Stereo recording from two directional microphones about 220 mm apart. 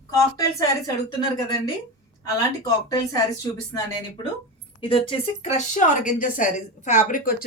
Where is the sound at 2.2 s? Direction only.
15° left (ahead or behind).